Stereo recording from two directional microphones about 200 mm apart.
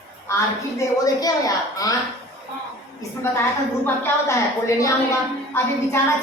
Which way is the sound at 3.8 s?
10° left (ahead or behind).